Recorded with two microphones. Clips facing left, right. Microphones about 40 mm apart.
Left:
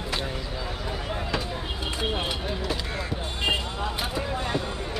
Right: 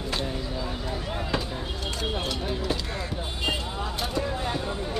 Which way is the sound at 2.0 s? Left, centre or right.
Left.